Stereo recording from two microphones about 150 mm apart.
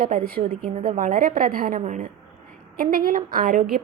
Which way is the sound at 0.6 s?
60° right (ahead or behind).